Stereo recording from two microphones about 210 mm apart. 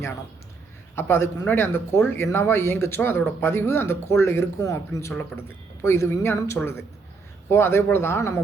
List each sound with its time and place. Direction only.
0.9 s speech: 10° left (ahead or behind)